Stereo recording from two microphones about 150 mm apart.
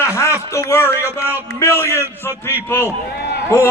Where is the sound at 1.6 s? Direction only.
15° left (ahead or behind).